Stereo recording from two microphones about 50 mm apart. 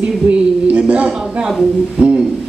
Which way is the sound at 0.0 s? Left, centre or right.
Right.